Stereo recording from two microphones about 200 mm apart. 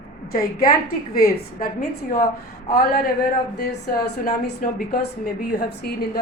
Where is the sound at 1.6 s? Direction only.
45° left (ahead or behind).